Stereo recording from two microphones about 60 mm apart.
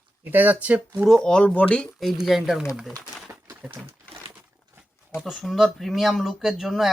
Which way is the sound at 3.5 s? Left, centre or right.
Right.